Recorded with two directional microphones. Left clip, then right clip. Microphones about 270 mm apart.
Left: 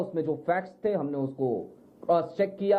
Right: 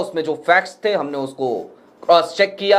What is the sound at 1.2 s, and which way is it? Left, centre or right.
Speech, right.